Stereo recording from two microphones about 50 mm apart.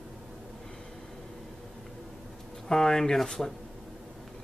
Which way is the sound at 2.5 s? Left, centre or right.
Centre.